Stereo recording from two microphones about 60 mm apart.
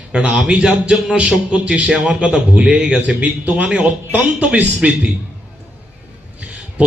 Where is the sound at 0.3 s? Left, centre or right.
Centre.